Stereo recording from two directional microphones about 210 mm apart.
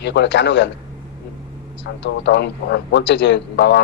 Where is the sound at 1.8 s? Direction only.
55° left (ahead or behind).